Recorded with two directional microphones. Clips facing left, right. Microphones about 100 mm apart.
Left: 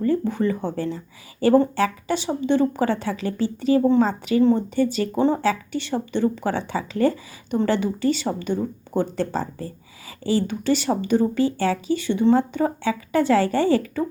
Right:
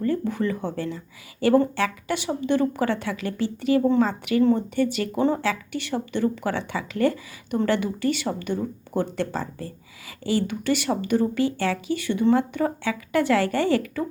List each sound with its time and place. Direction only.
0.0 s speech: 30° left (ahead or behind)